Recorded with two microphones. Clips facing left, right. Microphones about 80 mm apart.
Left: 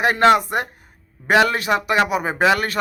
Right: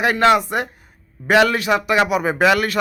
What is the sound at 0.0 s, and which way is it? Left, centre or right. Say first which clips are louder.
Speech: even; left.